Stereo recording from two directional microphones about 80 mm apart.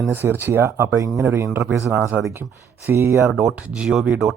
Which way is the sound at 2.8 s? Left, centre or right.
Right.